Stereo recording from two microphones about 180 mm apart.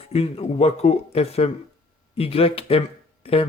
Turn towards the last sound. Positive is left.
turn(degrees=30)  # may be behind; listen again after turning